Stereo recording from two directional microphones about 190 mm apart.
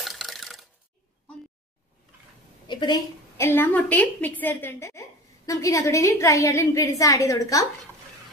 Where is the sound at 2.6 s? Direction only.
25° left (ahead or behind).